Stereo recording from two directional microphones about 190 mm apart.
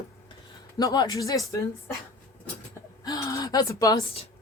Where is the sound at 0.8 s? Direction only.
20° left (ahead or behind).